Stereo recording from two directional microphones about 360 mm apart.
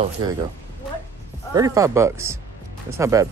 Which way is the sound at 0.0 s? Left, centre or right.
Centre.